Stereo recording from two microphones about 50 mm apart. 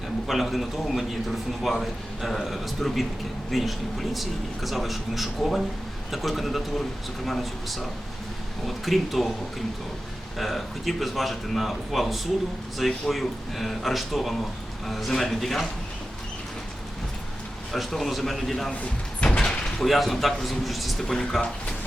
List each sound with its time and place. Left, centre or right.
0.3 s speech: centre
17.7 s speech: centre
19.2 s door: left
19.6 s speech: centre